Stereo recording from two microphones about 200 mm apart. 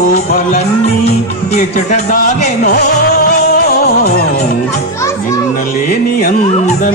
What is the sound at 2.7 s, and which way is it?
Music, 50° left (ahead or behind).